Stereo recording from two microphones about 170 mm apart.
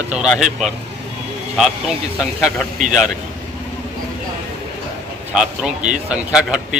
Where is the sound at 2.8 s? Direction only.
45° right (ahead or behind).